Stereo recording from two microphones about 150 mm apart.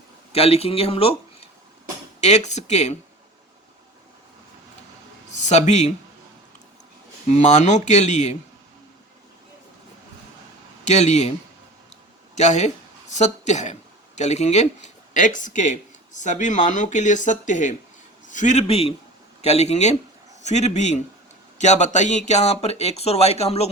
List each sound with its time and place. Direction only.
0.3 s speech: 40° left (ahead or behind)
5.4 s speech: 50° left (ahead or behind)
7.3 s speech: 50° left (ahead or behind)
10.8 s speech: 50° left (ahead or behind)
12.4 s speech: 50° left (ahead or behind)